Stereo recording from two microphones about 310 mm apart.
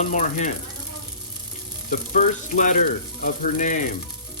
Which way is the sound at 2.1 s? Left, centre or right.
Left.